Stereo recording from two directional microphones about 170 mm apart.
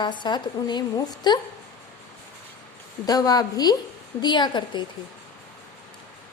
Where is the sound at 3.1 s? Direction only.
20° left (ahead or behind).